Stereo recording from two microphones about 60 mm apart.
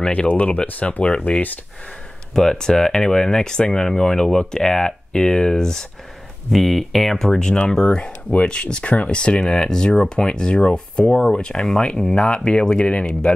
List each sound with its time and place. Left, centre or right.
0.0 s speech: centre
2.3 s speech: centre